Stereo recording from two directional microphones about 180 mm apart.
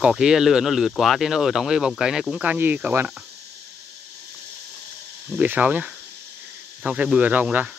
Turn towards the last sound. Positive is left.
turn(degrees=-10)  # may be behind; listen again after turning